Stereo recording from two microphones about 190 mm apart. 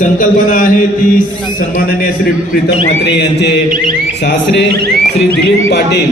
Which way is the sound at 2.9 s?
65° left (ahead or behind).